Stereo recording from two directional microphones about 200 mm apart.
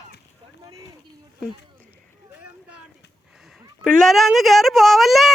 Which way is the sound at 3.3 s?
Centre (ahead or behind).